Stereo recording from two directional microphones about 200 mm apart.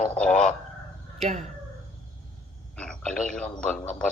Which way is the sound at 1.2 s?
40° right (ahead or behind).